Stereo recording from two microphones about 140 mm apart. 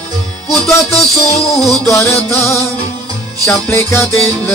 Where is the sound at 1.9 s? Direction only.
20° left (ahead or behind).